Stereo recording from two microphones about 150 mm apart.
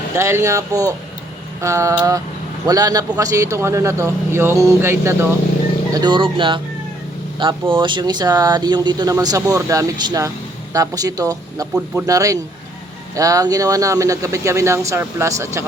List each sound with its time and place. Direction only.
0.2 s speech: 20° right (ahead or behind)
5.9 s speech: 30° right (ahead or behind)
7.7 s speech: 30° right (ahead or behind)